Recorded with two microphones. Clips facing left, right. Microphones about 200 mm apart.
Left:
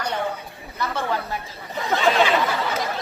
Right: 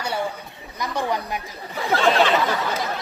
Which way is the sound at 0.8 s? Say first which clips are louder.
Right 1 dB; 15° right (ahead or behind).